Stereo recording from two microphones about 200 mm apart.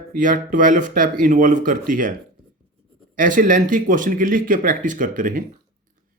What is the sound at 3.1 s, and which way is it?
Speech, 40° right (ahead or behind).